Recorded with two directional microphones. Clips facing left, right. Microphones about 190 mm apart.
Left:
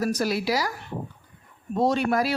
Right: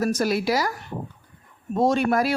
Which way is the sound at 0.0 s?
50° right (ahead or behind).